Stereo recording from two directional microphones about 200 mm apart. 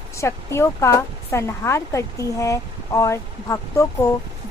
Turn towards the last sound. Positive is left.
turn(degrees=15)  # may be behind; listen again after turning